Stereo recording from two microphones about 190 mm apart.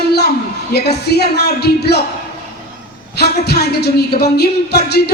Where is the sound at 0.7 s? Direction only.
60° left (ahead or behind).